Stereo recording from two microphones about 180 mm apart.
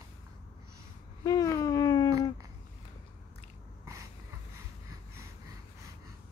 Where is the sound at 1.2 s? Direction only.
20° left (ahead or behind).